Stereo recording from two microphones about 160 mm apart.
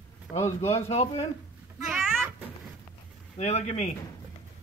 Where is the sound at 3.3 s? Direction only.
45° left (ahead or behind).